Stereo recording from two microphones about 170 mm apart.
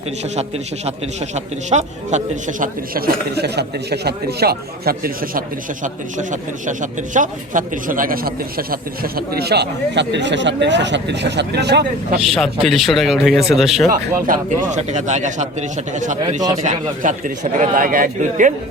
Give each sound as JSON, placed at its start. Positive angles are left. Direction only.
{"t": 1.7, "sound": "a man's voice", "side_deg": -45}
{"t": 3.3, "sound": "a man's voice", "side_deg": -75}
{"t": 5.8, "sound": "a man's voice", "side_deg": -50}
{"t": 12.2, "sound": "speech", "side_deg": 0}
{"t": 14.3, "sound": "a man's voice", "side_deg": -45}